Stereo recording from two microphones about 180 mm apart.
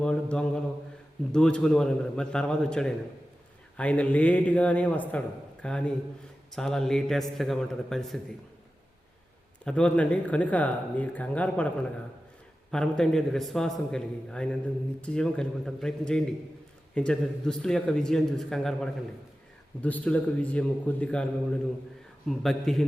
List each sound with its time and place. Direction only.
0.0 s a man's voice: 5° left (ahead or behind)
9.6 s a man's voice: 5° left (ahead or behind)
22.3 s a man's voice: centre (ahead or behind)